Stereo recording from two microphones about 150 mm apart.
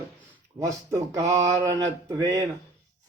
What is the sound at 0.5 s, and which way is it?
A man's voice, 20° right (ahead or behind).